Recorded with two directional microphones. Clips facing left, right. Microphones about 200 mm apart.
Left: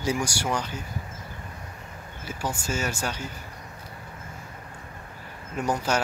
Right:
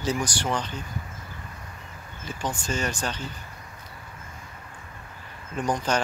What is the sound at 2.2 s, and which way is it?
Speech, 10° left (ahead or behind).